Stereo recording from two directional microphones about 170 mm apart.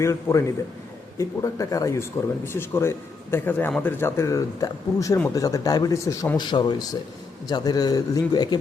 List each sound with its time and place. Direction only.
0.0 s speech: 15° left (ahead or behind)